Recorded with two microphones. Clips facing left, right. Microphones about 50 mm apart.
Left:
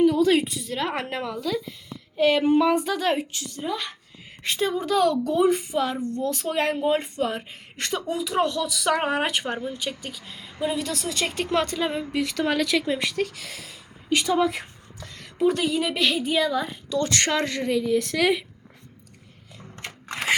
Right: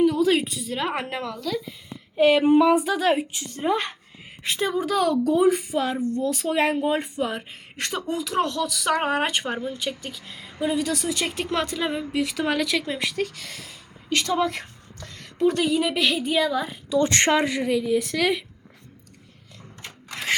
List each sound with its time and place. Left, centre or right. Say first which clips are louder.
0.0 s a woman's voice: left 1 dB; centre
1.9 s a woman's voice: right 3 dB; centre
3.4 s speech: right 5 dB; right
4.4 s speech: even; centre
17.1 s speech: right 3 dB; right
17.4 s speech: right 1 dB; centre
19.7 s a sound: left 3 dB; left